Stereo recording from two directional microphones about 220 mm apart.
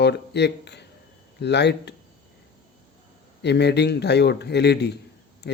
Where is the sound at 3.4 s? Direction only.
50° left (ahead or behind).